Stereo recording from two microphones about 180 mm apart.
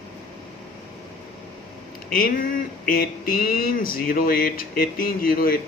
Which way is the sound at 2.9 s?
55° left (ahead or behind).